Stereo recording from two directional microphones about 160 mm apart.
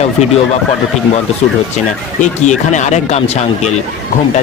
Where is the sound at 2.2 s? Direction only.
50° left (ahead or behind).